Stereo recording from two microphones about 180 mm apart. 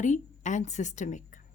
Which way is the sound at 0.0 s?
45° left (ahead or behind).